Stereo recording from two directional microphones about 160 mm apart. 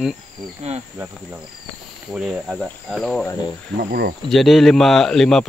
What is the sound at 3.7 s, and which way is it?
Speech, 70° right (ahead or behind).